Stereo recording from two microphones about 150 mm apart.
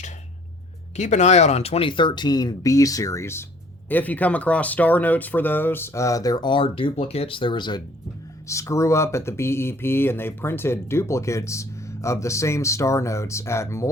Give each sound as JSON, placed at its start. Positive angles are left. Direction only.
{"t": 0.9, "sound": "speech", "side_deg": 50}
{"t": 8.4, "sound": "speech", "side_deg": 20}